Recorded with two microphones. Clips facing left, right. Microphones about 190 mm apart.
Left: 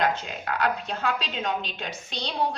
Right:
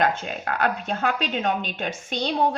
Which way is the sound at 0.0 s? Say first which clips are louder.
Right 3 dB; 50° right (ahead or behind).